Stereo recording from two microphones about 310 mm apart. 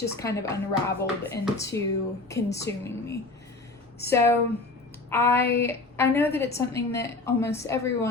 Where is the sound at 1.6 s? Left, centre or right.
Centre.